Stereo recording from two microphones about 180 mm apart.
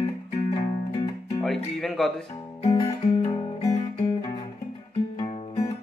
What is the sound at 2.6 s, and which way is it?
Music, 20° left (ahead or behind).